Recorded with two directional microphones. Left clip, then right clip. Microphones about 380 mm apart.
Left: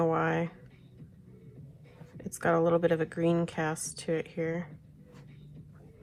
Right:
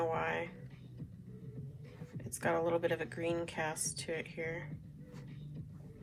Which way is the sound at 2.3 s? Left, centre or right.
Centre.